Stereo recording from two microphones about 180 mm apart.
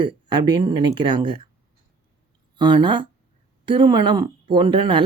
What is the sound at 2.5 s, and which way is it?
Speech, 25° right (ahead or behind).